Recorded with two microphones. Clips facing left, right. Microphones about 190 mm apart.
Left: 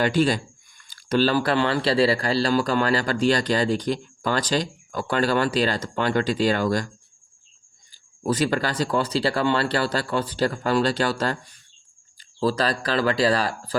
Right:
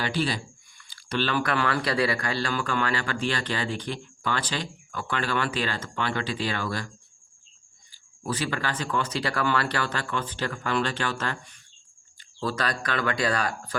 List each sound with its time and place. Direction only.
0.0 s speech: 45° left (ahead or behind)
8.2 s speech: 40° left (ahead or behind)